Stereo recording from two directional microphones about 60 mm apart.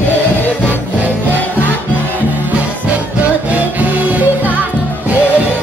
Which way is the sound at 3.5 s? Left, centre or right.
Right.